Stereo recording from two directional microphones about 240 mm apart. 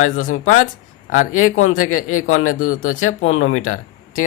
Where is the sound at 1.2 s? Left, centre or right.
Left.